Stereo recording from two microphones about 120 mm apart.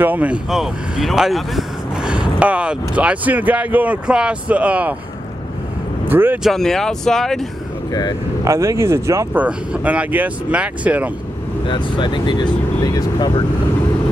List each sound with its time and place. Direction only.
0.0 s speech: 15° right (ahead or behind)
6.0 s speech: 15° right (ahead or behind)
6.4 s speech: 5° left (ahead or behind)
7.9 s speech: 35° left (ahead or behind)
8.5 s speech: 25° right (ahead or behind)
9.4 s speech: 10° right (ahead or behind)
11.6 s speech: 40° left (ahead or behind)